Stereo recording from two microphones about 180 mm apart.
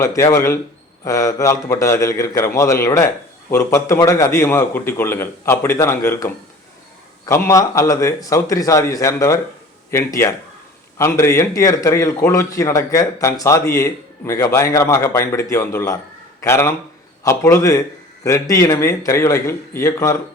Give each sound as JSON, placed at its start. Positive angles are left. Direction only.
{"t": 0.0, "sound": "a man's voice", "side_deg": 15}